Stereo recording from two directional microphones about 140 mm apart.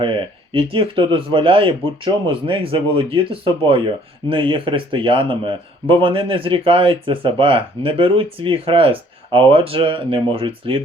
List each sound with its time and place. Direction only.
0.0 s speech: 35° right (ahead or behind)